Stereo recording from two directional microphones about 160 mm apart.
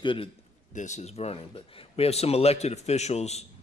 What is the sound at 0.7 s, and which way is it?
Speech, 45° left (ahead or behind).